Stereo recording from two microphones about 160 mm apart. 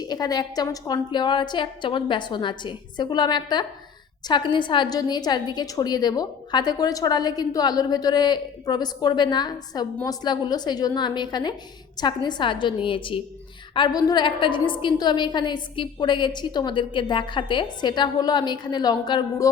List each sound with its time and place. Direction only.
0.0 s a woman's voice: 25° left (ahead or behind)